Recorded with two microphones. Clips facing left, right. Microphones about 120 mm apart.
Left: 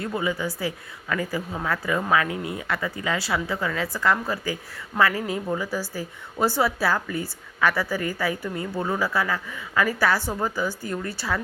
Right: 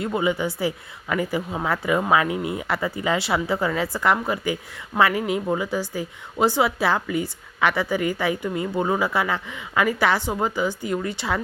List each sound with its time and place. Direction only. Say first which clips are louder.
0.0 s a woman's voice: right 4 dB; 20° right (ahead or behind)